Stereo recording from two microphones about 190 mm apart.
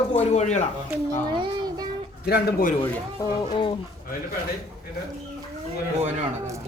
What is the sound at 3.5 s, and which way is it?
Speech, 25° left (ahead or behind).